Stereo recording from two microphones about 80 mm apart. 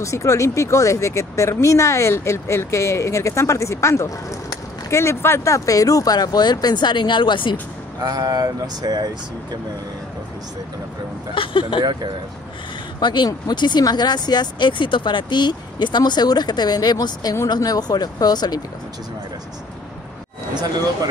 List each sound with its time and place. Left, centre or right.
0.0 s speech: left
8.0 s speech: right
11.3 s speech: left
11.8 s speech: right
13.0 s speech: left